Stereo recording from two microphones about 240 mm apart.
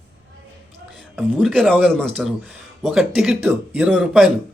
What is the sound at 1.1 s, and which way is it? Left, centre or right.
A man's voice, centre.